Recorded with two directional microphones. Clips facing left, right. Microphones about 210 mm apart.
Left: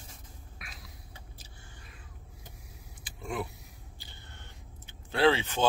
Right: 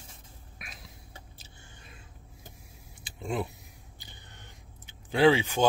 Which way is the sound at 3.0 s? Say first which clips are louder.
Right 3 dB; 25° right (ahead or behind).